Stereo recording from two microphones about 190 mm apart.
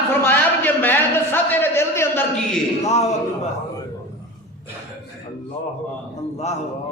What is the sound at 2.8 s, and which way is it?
Speech, 35° left (ahead or behind).